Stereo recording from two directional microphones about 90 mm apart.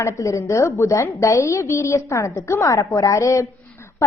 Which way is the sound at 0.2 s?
35° left (ahead or behind).